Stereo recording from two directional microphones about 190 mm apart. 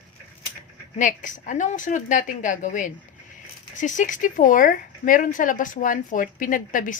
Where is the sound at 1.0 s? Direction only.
45° left (ahead or behind).